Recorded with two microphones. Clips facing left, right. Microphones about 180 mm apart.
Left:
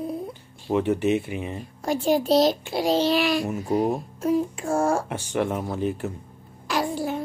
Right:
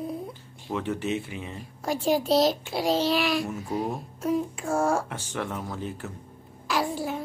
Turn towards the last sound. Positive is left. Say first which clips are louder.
# left 2 dB
turn(degrees=0)  # may be behind; listen again after turning